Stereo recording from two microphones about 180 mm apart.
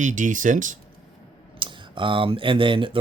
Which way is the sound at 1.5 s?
25° right (ahead or behind).